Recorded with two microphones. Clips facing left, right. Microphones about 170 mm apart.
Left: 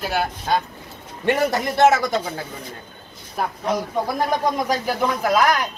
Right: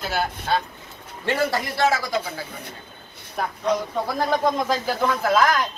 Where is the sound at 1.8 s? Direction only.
20° left (ahead or behind).